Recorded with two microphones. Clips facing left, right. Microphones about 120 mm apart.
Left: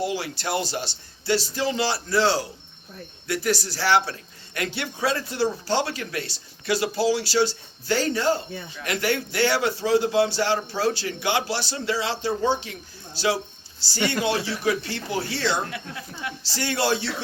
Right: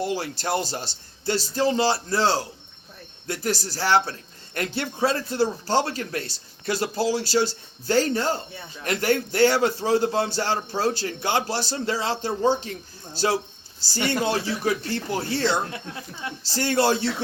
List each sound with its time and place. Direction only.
0.2 s a man's voice: 45° right (ahead or behind)